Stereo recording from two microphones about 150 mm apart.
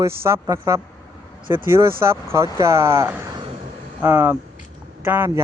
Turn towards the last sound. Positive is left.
turn(degrees=-15)  # may be behind; listen again after turning